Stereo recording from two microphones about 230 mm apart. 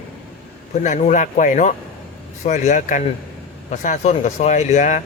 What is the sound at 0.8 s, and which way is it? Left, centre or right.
Speech, left.